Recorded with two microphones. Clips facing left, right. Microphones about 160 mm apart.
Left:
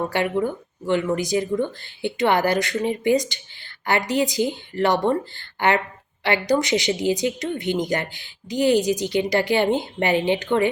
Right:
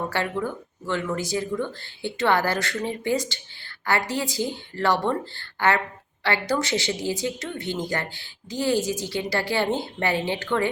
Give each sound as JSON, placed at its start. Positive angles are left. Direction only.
{"t": 0.1, "sound": "speech", "side_deg": 15}